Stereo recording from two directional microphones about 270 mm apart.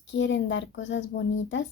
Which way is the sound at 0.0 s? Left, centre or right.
Left.